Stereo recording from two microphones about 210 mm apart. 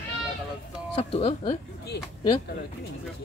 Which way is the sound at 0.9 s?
25° left (ahead or behind).